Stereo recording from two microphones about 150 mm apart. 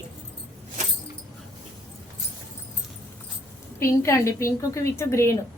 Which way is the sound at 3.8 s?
20° left (ahead or behind).